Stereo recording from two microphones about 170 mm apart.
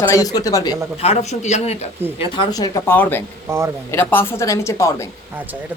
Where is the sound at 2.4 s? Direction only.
20° left (ahead or behind).